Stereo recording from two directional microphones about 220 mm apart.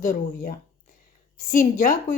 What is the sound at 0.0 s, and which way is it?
A woman's voice, 35° left (ahead or behind).